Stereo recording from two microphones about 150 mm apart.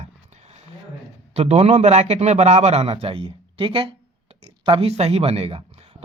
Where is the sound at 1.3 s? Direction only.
45° right (ahead or behind).